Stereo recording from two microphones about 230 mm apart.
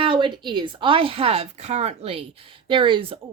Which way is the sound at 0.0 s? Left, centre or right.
Right.